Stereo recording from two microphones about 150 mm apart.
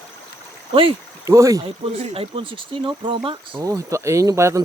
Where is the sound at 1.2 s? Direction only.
20° right (ahead or behind).